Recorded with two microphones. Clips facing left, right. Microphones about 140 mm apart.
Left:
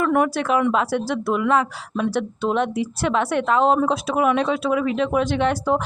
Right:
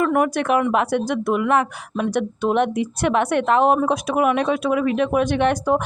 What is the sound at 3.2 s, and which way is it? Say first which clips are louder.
Speech: right 2 dB; 55° right (ahead or behind).